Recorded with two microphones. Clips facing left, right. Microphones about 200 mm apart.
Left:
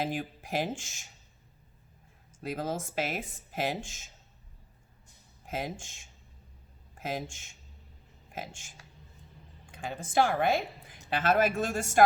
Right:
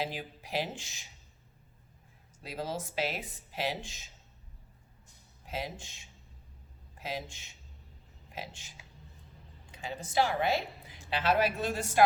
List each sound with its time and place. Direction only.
0.0 s a woman's voice: 50° left (ahead or behind)
2.4 s a woman's voice: 50° left (ahead or behind)
5.5 s a woman's voice: 50° left (ahead or behind)
9.7 s a woman's voice: 50° left (ahead or behind)